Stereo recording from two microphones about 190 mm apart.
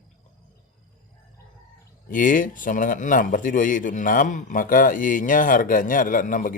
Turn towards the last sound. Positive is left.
turn(degrees=45)  # may be behind; listen again after turning